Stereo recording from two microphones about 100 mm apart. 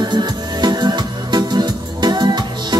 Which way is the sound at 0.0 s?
45° right (ahead or behind).